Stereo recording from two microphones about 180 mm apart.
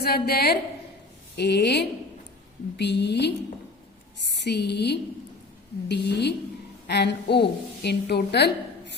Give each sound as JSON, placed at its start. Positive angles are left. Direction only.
{"t": 0.0, "sound": "a woman's voice", "side_deg": 60}